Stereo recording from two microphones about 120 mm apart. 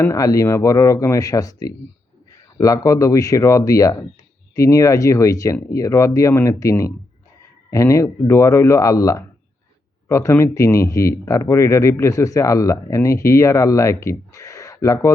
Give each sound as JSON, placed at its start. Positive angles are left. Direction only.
{"t": 0.0, "sound": "speech", "side_deg": 30}